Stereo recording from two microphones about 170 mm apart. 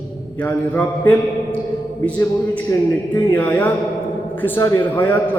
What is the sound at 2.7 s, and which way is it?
A man's voice, 15° left (ahead or behind).